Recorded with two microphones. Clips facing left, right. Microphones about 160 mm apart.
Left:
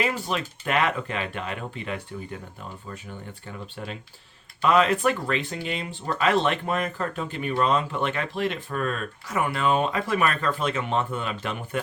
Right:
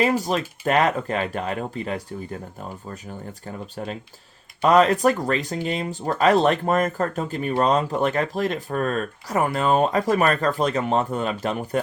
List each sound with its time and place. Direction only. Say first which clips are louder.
0.0 s speech: right 6 dB; 40° right (ahead or behind)